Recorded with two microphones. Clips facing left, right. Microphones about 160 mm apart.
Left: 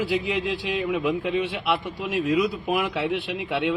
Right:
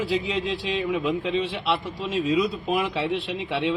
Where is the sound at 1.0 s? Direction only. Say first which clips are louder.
Left 1 dB; 5° left (ahead or behind).